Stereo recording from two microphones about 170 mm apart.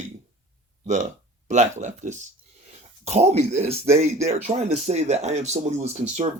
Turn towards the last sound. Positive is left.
turn(degrees=-40)  # may be behind; listen again after turning